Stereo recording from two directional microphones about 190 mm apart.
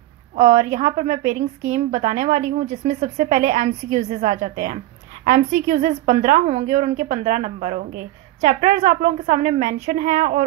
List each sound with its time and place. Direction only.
0.4 s a woman's voice: 40° right (ahead or behind)